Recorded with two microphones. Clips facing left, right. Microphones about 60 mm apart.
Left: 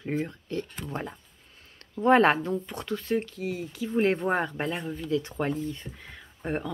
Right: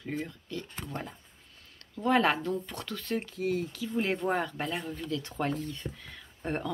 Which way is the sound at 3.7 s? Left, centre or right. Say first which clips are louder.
Left 6 dB; left.